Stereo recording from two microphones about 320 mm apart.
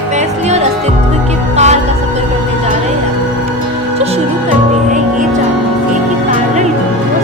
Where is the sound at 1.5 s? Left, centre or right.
Right.